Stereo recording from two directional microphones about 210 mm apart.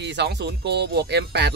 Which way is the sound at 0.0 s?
55° right (ahead or behind).